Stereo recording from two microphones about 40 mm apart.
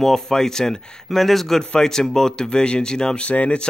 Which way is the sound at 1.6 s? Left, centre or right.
Centre.